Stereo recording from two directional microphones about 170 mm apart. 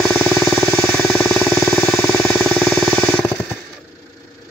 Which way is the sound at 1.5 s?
15° left (ahead or behind).